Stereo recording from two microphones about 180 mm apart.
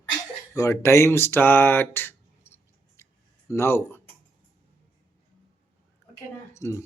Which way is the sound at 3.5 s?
15° left (ahead or behind).